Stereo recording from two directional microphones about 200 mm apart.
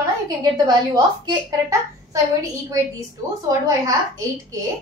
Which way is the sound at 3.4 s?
15° right (ahead or behind).